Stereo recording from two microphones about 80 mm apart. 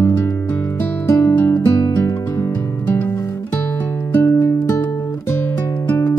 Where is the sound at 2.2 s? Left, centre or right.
Left.